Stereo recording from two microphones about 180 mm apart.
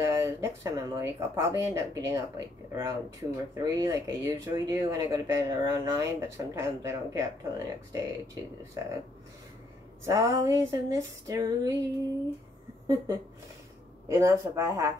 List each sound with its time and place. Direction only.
0.0 s speech: 15° right (ahead or behind)
10.0 s speech: 15° right (ahead or behind)
12.8 s speech: 20° right (ahead or behind)